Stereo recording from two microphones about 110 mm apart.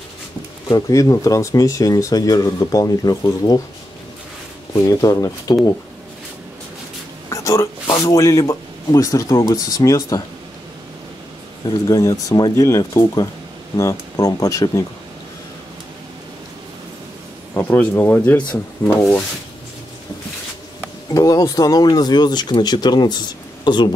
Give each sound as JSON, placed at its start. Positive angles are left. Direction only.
{"t": 0.7, "sound": "speech", "side_deg": 35}
{"t": 4.7, "sound": "speech", "side_deg": 30}
{"t": 7.2, "sound": "a sound", "side_deg": 30}
{"t": 7.9, "sound": "speech", "side_deg": 30}
{"t": 11.9, "sound": "speech", "side_deg": 30}
{"t": 17.6, "sound": "speech", "side_deg": 15}
{"t": 21.1, "sound": "speech", "side_deg": 30}